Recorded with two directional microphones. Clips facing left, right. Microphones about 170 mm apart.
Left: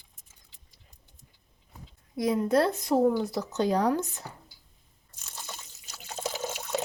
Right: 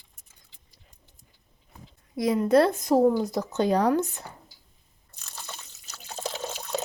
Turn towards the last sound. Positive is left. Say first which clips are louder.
# even
turn(degrees=10)  # may be behind; listen again after turning